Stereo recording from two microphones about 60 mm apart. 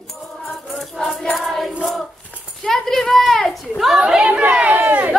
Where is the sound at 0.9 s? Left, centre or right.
Centre.